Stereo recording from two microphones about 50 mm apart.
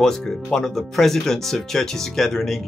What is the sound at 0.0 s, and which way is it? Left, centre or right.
Speech, centre.